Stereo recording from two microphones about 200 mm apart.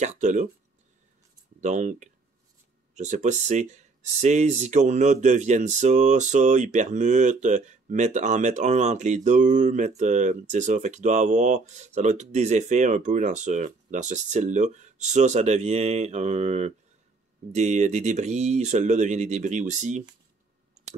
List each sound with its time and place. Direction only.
0.0 s speech: 35° right (ahead or behind)
1.6 s speech: 35° right (ahead or behind)